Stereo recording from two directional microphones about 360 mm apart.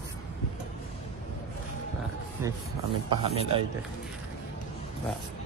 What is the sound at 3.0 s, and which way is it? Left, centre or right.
Speech, centre.